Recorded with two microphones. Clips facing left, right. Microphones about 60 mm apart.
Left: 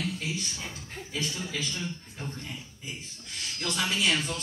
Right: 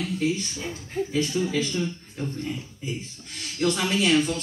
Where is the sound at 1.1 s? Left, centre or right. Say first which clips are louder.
Right 8 dB; right.